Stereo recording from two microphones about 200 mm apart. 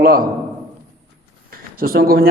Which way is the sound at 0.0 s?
45° right (ahead or behind).